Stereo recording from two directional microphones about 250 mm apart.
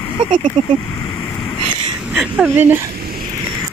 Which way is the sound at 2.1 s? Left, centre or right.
Centre.